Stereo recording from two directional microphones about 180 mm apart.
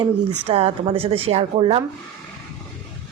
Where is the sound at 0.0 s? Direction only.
35° right (ahead or behind).